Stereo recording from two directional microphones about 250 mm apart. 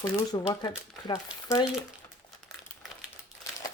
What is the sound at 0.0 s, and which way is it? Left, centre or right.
Speech, centre.